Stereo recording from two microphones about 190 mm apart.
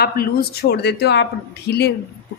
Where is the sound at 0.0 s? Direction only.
55° left (ahead or behind).